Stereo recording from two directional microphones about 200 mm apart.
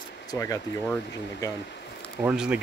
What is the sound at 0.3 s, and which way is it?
Speech, 15° left (ahead or behind).